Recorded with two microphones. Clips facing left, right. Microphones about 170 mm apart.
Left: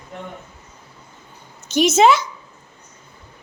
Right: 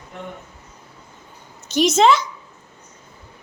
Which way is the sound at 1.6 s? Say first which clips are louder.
Left 1 dB; centre (ahead or behind).